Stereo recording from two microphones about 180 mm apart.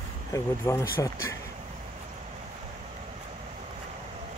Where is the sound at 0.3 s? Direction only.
15° left (ahead or behind).